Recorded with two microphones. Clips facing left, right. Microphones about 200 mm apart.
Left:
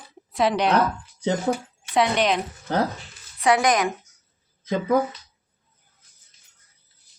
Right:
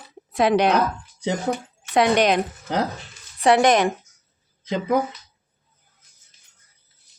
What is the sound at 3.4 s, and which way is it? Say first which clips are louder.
Speech: right 3 dB; 30° right (ahead or behind).